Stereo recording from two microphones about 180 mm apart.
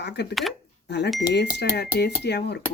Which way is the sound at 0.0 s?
70° left (ahead or behind).